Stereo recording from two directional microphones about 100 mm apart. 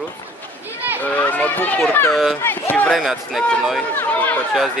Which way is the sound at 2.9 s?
Centre (ahead or behind).